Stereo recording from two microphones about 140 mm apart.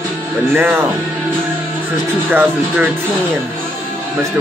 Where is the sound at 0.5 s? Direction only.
15° right (ahead or behind).